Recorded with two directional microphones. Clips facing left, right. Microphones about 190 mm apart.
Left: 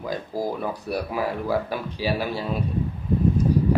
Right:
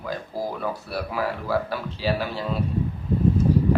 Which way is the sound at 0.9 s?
15° left (ahead or behind).